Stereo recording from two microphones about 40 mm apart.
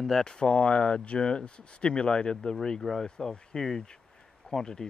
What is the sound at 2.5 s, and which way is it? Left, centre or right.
Speech, centre.